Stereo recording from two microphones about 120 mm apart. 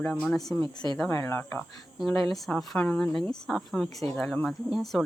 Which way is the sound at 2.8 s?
10° left (ahead or behind).